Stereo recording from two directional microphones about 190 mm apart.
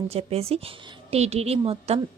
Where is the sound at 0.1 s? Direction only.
30° right (ahead or behind).